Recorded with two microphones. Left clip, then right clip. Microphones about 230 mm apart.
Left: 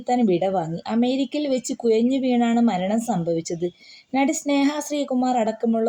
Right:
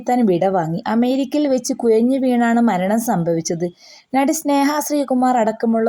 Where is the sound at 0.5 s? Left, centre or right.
Right.